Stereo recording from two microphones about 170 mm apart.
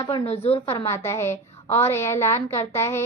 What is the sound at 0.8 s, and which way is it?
A woman's voice, 15° left (ahead or behind).